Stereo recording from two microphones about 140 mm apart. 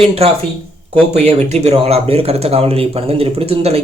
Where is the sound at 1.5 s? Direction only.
50° right (ahead or behind).